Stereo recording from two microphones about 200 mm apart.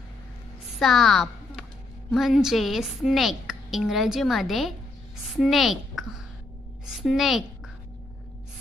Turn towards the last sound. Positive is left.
turn(degrees=0)  # may be behind; listen again after turning